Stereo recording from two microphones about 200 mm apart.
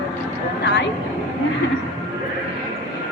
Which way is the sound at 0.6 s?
60° left (ahead or behind).